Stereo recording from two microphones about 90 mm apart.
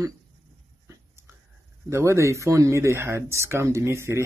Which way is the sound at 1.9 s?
30° right (ahead or behind).